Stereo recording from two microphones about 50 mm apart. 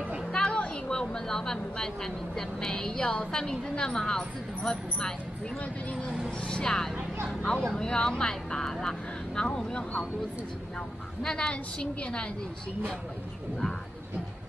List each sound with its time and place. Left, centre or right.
0.3 s a sound: centre
0.8 s speech: centre
6.4 s speech: centre
11.2 s a woman's voice: centre